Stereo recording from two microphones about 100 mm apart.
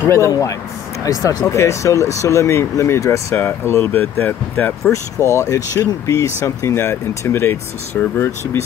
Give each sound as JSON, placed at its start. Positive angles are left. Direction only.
{"t": 0.1, "sound": "speech", "side_deg": 30}
{"t": 5.3, "sound": "speech", "side_deg": 30}